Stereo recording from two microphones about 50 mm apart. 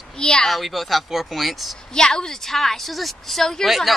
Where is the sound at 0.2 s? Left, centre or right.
Centre.